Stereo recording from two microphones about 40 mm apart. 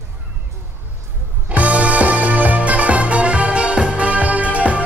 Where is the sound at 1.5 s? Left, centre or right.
Right.